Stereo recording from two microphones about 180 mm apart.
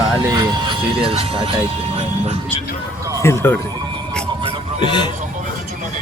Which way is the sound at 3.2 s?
15° left (ahead or behind).